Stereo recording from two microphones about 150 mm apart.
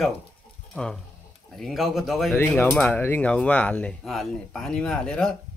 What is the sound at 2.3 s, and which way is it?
Speech, 15° left (ahead or behind).